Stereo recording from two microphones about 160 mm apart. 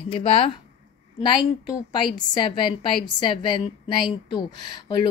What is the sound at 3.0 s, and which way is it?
Speech, 30° left (ahead or behind).